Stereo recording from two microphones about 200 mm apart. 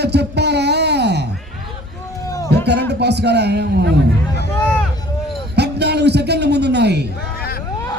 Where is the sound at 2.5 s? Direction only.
55° right (ahead or behind).